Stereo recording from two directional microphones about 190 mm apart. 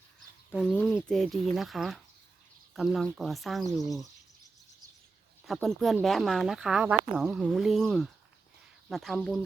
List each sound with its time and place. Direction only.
0.5 s speech: centre (ahead or behind)
5.5 s speech: centre (ahead or behind)